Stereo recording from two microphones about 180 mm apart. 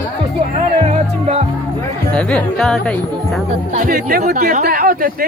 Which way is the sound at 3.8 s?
50° right (ahead or behind).